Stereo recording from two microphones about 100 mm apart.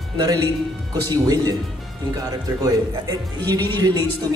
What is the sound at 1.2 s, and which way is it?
A man's voice, 40° right (ahead or behind).